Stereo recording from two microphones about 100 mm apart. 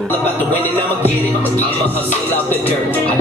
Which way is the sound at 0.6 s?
20° left (ahead or behind).